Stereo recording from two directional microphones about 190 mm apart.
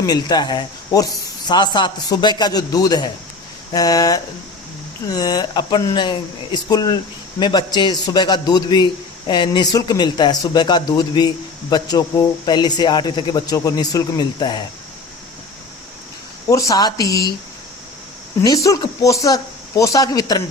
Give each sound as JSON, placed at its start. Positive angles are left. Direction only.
{"t": 0.0, "sound": "speech", "side_deg": 20}
{"t": 16.5, "sound": "speech", "side_deg": 15}
{"t": 18.4, "sound": "speech", "side_deg": 20}